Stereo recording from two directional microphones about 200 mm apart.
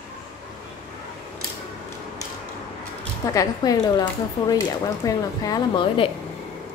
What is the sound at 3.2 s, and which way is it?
A woman's voice, 15° left (ahead or behind).